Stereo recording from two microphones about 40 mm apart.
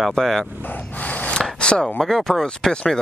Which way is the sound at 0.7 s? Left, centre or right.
Left.